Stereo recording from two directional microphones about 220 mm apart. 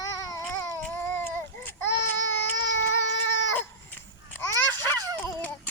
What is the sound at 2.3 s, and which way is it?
Baby cry, 55° left (ahead or behind).